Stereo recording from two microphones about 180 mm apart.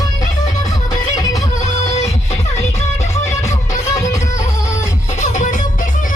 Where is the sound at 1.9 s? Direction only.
40° left (ahead or behind).